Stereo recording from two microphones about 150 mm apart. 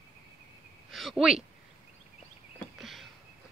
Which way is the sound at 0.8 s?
Centre (ahead or behind).